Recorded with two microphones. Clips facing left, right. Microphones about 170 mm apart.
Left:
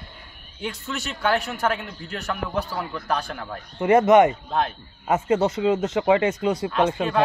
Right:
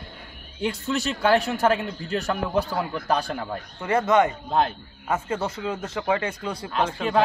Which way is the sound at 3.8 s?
20° left (ahead or behind).